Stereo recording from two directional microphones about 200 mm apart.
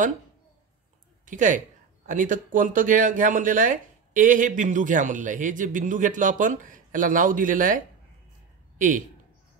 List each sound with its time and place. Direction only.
1.2 s a man's voice: 40° right (ahead or behind)